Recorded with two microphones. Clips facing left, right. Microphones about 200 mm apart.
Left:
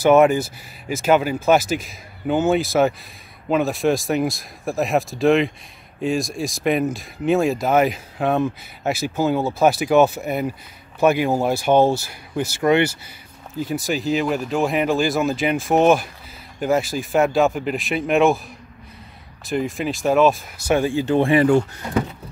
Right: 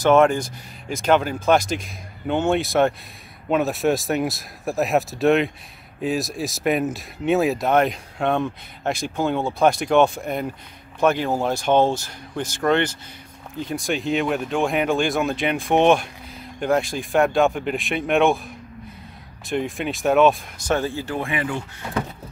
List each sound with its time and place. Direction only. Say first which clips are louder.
0.0 s speech: left 2 dB; 10° left (ahead or behind)
19.4 s speech: left 2 dB; centre (ahead or behind); by 21.2 s 20° left (ahead or behind)
21.2 s speech: left 12 dB; 35° left (ahead or behind)